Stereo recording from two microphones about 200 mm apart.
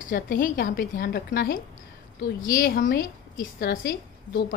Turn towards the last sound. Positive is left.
turn(degrees=50)  # may be behind; listen again after turning